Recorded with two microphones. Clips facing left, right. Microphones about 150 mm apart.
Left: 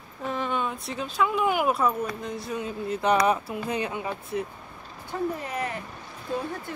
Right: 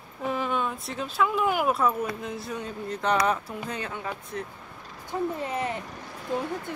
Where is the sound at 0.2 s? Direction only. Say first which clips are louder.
Right 1 dB; 5° right (ahead or behind); by 4.5 s 10° left (ahead or behind).